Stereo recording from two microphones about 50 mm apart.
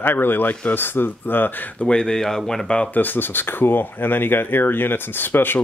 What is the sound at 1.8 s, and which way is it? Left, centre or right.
Speech, centre.